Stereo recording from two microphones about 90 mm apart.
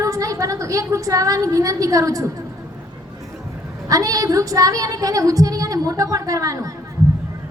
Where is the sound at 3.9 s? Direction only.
40° right (ahead or behind).